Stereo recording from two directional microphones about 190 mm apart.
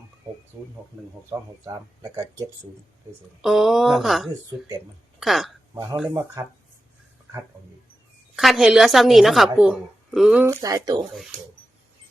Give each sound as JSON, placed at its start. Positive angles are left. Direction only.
{"t": 1.3, "sound": "speech", "side_deg": -15}
{"t": 3.4, "sound": "a woman's voice", "side_deg": 0}
{"t": 6.1, "sound": "speech", "side_deg": -15}
{"t": 8.4, "sound": "a woman's voice", "side_deg": 0}
{"t": 10.4, "sound": "speech", "side_deg": -15}